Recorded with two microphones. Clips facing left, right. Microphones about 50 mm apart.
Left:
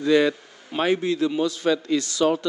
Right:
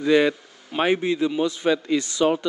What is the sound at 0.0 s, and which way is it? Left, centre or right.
A man's voice, centre.